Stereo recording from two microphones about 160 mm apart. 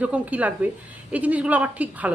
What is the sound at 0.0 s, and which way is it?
A woman's voice, 10° right (ahead or behind).